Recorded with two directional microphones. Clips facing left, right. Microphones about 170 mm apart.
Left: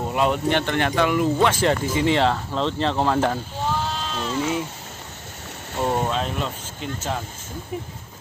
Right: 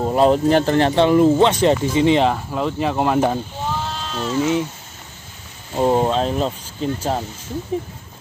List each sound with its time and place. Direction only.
0.0 s speech: 35° right (ahead or behind)
1.4 s speech: 20° right (ahead or behind)
3.6 s sheep: centre (ahead or behind)
4.4 s speech: 20° right (ahead or behind)
5.8 s speech: 30° right (ahead or behind)